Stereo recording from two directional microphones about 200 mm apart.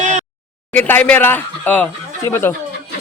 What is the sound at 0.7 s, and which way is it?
Speech, 10° left (ahead or behind).